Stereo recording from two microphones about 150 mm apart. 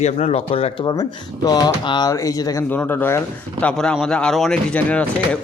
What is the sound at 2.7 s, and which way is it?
Speech, 10° left (ahead or behind).